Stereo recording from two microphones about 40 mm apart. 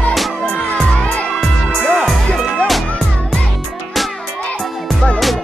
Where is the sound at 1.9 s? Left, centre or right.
Centre.